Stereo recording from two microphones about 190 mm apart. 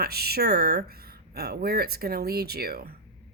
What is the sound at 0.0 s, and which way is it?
Speech, 55° right (ahead or behind).